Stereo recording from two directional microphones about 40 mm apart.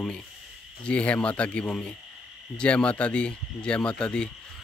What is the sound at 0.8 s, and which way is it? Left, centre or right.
Speech, left.